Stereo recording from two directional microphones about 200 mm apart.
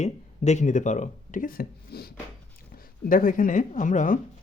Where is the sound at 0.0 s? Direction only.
35° left (ahead or behind).